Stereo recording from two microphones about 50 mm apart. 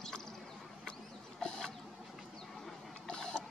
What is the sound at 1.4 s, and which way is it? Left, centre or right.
Chicken, centre.